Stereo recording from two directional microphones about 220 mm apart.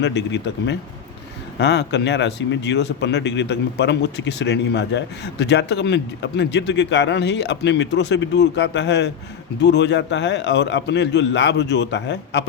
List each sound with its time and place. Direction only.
0.0 s speech: 50° left (ahead or behind)